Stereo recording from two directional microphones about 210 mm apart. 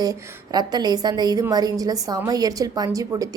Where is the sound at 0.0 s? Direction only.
20° right (ahead or behind).